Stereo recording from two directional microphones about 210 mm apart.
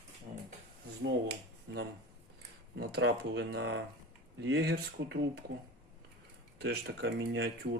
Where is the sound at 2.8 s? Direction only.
55° right (ahead or behind).